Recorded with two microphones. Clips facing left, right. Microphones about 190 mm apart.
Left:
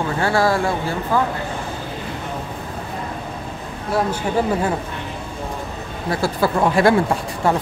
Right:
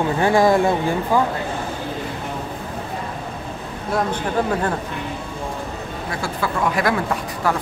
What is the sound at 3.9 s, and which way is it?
Speech, 5° left (ahead or behind).